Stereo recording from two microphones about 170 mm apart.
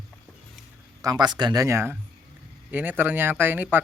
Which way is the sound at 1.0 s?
25° right (ahead or behind).